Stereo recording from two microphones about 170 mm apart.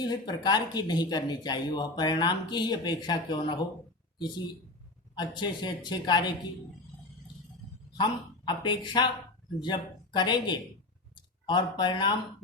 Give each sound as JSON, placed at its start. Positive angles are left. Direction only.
{"t": 0.0, "sound": "speech", "side_deg": 25}
{"t": 5.1, "sound": "speech", "side_deg": 25}
{"t": 8.4, "sound": "speech", "side_deg": 25}